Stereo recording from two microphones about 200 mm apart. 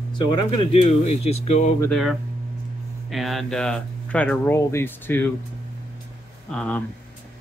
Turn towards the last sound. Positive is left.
turn(degrees=5)  # may be behind; listen again after turning